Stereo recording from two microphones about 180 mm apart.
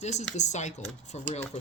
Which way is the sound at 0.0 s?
40° left (ahead or behind).